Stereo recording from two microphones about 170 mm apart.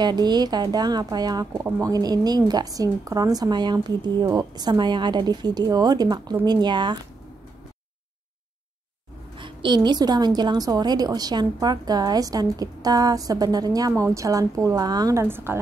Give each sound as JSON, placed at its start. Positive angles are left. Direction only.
{"t": 0.0, "sound": "a woman's voice", "side_deg": -25}
{"t": 9.4, "sound": "a woman's voice", "side_deg": -25}